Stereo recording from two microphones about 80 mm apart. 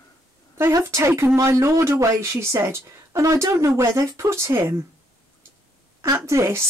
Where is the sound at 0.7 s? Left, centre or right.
Right.